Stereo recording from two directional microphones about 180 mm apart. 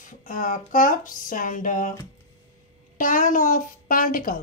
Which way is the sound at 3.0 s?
45° left (ahead or behind).